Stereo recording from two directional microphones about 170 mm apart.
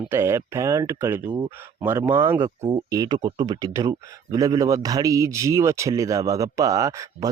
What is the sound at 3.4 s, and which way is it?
A man's voice, 20° right (ahead or behind).